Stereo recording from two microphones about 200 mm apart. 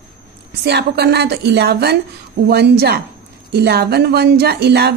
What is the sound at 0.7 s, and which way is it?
Speech, 55° right (ahead or behind).